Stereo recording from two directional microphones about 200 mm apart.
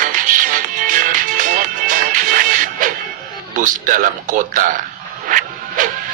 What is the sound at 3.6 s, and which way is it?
Speech, 40° right (ahead or behind).